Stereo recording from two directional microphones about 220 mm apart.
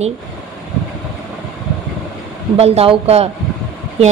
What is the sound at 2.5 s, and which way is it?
Speech, 30° right (ahead or behind).